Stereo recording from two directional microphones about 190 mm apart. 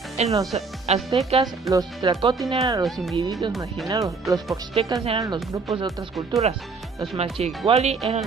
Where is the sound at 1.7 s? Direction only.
20° right (ahead or behind).